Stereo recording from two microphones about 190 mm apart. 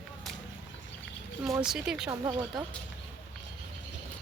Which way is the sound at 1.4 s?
Centre (ahead or behind).